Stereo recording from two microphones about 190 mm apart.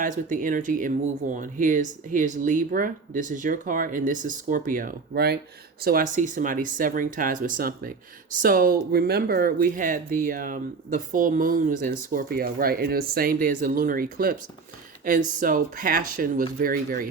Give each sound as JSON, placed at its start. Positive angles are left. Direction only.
{"t": 0.0, "sound": "speech", "side_deg": -45}